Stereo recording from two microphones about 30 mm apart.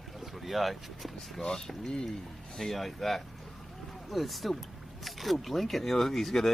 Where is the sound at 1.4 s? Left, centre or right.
Centre.